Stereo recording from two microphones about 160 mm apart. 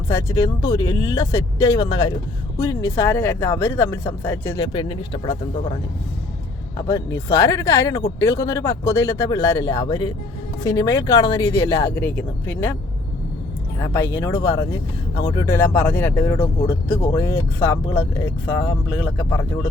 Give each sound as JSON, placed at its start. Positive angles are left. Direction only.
{"t": 0.1, "sound": "speech", "side_deg": 20}
{"t": 6.7, "sound": "speech", "side_deg": 20}
{"t": 13.7, "sound": "speech", "side_deg": 15}
{"t": 15.5, "sound": "speech", "side_deg": 10}